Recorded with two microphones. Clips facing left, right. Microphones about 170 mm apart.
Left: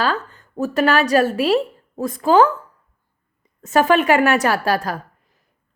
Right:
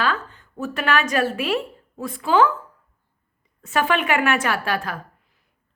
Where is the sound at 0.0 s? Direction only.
40° left (ahead or behind).